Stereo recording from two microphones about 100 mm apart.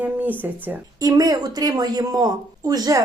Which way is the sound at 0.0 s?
15° right (ahead or behind).